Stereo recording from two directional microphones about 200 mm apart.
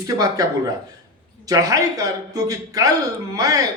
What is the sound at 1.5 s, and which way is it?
Speech, 15° right (ahead or behind).